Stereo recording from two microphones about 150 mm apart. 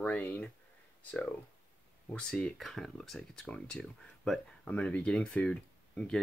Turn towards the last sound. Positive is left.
turn(degrees=5)  # may be behind; listen again after turning